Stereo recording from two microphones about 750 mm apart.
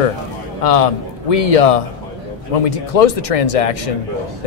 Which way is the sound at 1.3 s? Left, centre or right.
Left.